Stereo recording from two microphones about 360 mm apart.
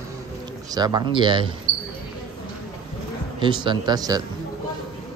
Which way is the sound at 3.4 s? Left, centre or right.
Centre.